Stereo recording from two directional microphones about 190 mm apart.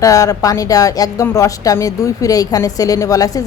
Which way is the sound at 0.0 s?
20° left (ahead or behind).